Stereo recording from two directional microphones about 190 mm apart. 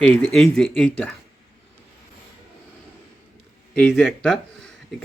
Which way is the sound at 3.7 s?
5° left (ahead or behind).